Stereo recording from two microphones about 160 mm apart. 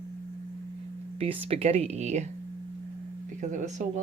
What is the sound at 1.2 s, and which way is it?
Speech, 40° right (ahead or behind).